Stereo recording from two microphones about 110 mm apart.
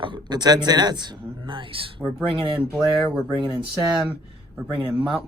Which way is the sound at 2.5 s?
5° right (ahead or behind).